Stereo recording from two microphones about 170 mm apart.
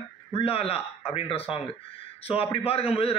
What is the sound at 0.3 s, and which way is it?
A man's voice, 35° left (ahead or behind).